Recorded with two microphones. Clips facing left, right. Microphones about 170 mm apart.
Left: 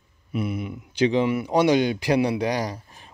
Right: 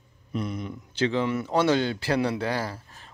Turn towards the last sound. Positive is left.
turn(degrees=15)  # may be behind; listen again after turning